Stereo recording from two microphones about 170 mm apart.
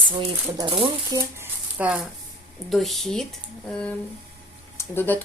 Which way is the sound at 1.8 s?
5° right (ahead or behind).